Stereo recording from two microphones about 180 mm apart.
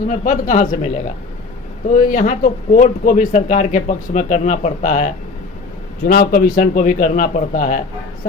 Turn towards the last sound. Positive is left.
turn(degrees=45)  # may be behind; listen again after turning